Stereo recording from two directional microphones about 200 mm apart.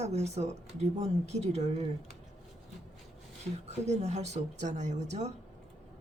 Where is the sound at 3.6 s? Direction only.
35° right (ahead or behind).